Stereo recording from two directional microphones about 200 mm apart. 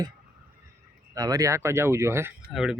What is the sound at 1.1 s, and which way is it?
Speech, 20° right (ahead or behind).